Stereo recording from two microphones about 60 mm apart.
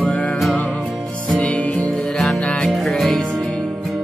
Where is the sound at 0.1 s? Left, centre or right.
Centre.